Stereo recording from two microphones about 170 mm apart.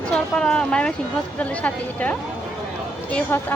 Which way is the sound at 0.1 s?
5° left (ahead or behind).